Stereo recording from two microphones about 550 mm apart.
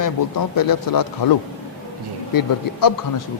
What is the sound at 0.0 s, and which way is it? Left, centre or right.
A man's voice, left.